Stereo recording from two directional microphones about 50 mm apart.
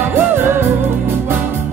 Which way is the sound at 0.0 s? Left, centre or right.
Right.